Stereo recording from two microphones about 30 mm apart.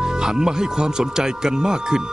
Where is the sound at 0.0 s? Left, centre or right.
Right.